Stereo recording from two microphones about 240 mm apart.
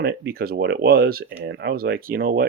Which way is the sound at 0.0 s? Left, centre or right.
Right.